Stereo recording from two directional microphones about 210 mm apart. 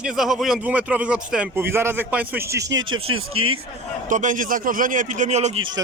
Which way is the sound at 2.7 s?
70° right (ahead or behind).